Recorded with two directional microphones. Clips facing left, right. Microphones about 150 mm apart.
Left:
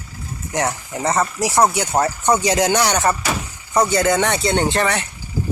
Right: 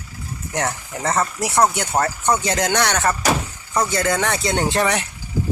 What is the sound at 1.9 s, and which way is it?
Speech, 10° left (ahead or behind).